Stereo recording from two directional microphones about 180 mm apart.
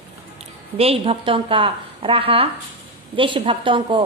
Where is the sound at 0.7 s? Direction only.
35° right (ahead or behind).